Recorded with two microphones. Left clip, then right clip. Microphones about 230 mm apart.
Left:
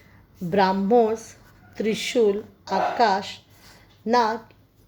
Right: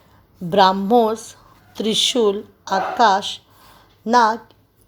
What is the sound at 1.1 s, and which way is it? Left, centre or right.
Speech, right.